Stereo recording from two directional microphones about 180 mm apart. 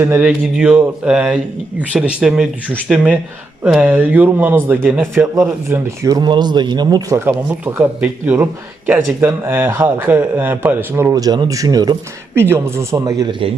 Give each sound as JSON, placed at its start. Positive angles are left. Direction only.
{"t": 0.0, "sound": "a man's voice", "side_deg": -10}